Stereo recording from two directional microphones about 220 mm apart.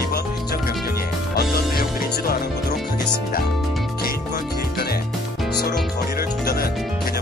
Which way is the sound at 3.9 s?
45° left (ahead or behind).